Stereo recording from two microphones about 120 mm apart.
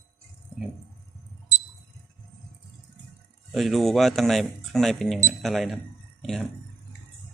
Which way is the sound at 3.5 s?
Centre (ahead or behind).